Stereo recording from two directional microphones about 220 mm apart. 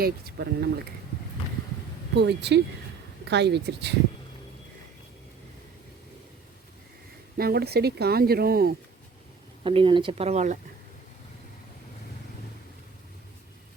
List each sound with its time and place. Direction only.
0.0 s speech: 45° right (ahead or behind)
2.1 s speech: 50° right (ahead or behind)
7.3 s speech: 45° right (ahead or behind)
9.6 s speech: 25° right (ahead or behind)